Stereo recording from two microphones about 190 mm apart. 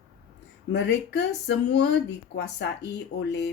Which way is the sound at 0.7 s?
65° left (ahead or behind).